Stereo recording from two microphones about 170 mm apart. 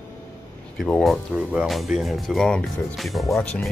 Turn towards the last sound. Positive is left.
turn(degrees=5)  # may be behind; listen again after turning